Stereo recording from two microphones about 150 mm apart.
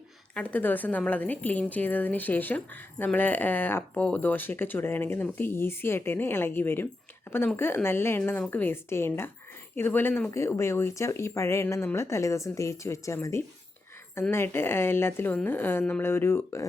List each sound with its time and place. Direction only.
0.3 s a woman's voice: 10° left (ahead or behind)